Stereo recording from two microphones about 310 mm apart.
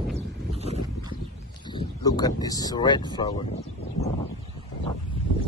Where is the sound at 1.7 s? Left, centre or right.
Centre.